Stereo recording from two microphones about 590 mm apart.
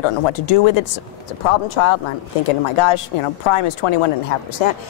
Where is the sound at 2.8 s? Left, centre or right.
Left.